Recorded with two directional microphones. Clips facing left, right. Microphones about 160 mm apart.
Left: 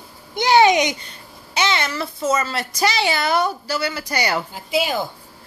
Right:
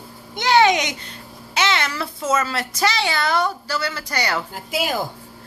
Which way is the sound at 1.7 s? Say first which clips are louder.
Left 1 dB; 10° left (ahead or behind).